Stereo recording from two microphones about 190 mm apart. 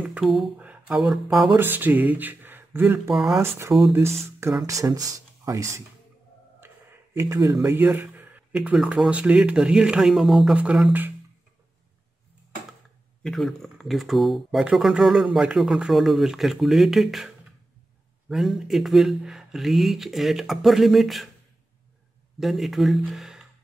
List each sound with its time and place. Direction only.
0.0 s speech: 5° right (ahead or behind)
3.4 s speech: 15° right (ahead or behind)
6.6 s a sound: 10° right (ahead or behind)
7.2 s speech: 15° right (ahead or behind)
13.2 s speech: centre (ahead or behind)
18.3 s speech: centre (ahead or behind)
22.4 s speech: centre (ahead or behind)